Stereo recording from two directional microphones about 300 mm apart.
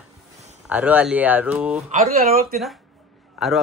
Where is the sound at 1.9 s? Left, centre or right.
Right.